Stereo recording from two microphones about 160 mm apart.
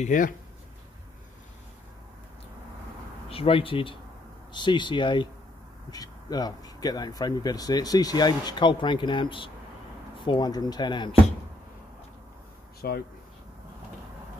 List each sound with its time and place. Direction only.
0.0 s speech: 55° left (ahead or behind)
3.3 s speech: 35° left (ahead or behind)
12.8 s speech: 75° left (ahead or behind)